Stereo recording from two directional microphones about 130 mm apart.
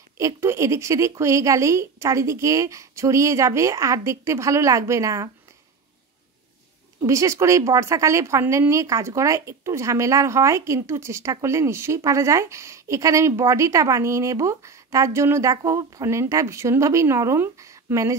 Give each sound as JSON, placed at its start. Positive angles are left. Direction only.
{"t": 0.2, "sound": "a woman's voice", "side_deg": -20}
{"t": 7.0, "sound": "a woman's voice", "side_deg": -25}